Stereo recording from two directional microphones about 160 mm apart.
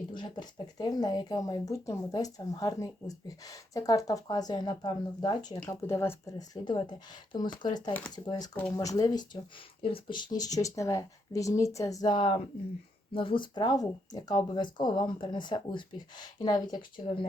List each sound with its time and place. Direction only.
0.1 s speech: 30° left (ahead or behind)
8.5 s speech: 10° left (ahead or behind)
8.8 s speech: 20° left (ahead or behind)